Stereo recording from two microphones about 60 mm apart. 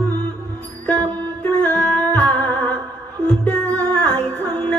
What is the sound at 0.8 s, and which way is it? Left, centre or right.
Music, left.